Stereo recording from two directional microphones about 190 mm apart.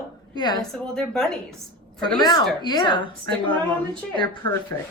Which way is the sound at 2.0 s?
25° left (ahead or behind).